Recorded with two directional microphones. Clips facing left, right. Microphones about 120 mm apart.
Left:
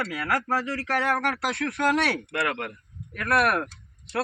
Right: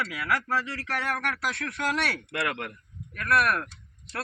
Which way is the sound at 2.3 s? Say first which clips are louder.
Left 3 dB; 30° left (ahead or behind).